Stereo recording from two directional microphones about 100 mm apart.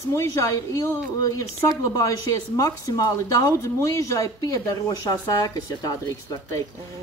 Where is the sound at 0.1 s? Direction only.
30° left (ahead or behind).